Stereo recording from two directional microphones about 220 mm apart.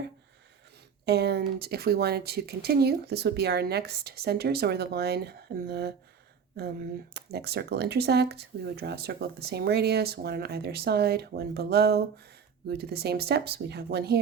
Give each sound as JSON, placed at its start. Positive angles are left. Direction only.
{"t": 1.0, "sound": "speech", "side_deg": -50}